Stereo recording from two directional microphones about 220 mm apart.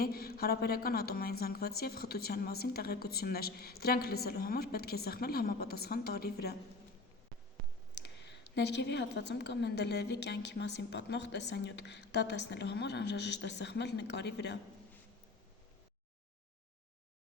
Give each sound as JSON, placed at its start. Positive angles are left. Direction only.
{"t": 0.0, "sound": "a woman's voice", "side_deg": 45}
{"t": 8.0, "sound": "a woman's voice", "side_deg": 50}